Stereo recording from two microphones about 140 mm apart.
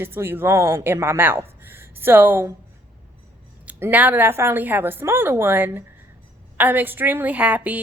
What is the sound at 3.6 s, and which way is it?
A woman's voice, 10° right (ahead or behind).